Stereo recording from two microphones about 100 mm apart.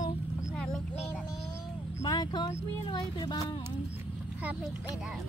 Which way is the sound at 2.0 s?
45° left (ahead or behind).